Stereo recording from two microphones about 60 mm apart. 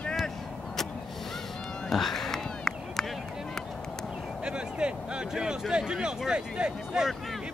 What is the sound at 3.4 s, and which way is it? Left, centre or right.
Run, centre.